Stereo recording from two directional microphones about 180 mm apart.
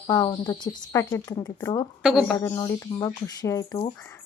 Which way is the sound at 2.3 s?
15° left (ahead or behind).